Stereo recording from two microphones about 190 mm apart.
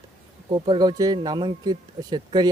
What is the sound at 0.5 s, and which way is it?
Speech, 25° right (ahead or behind).